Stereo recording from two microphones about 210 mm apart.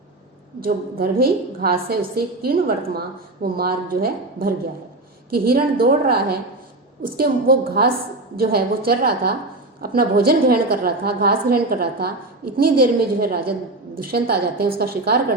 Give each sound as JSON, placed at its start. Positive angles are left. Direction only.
{"t": 0.6, "sound": "a woman's voice", "side_deg": -45}